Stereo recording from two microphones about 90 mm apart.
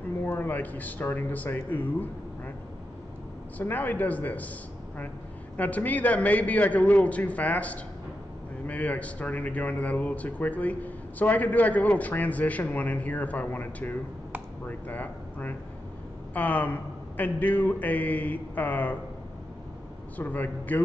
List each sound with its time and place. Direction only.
0.2 s speech: 20° left (ahead or behind)
3.5 s speech: 20° left (ahead or behind)
5.6 s speech: 15° left (ahead or behind)
20.2 s speech: 20° left (ahead or behind)